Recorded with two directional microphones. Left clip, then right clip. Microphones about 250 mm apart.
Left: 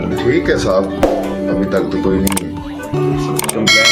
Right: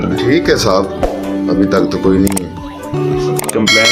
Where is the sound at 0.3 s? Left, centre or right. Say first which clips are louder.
Right 2 dB; right.